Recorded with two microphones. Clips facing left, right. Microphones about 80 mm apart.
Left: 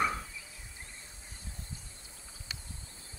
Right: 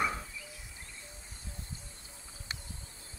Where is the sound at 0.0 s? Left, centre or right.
Centre.